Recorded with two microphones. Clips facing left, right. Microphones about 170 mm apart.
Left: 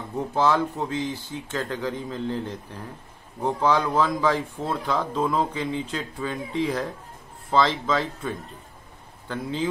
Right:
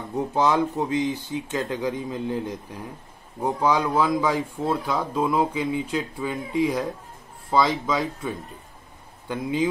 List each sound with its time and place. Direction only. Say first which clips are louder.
0.3 s speech: even; 15° right (ahead or behind)